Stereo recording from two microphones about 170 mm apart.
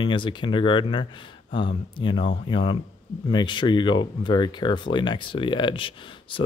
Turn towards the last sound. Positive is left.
turn(degrees=30)  # may be behind; listen again after turning